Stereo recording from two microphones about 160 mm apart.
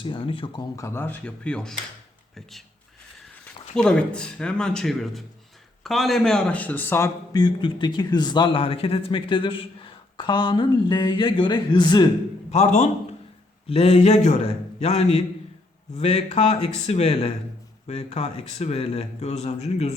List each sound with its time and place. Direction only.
0.0 s a man's voice: 35° left (ahead or behind)
12.5 s a man's voice: 45° left (ahead or behind)